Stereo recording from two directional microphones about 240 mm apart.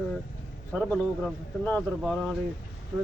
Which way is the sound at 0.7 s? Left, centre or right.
Centre.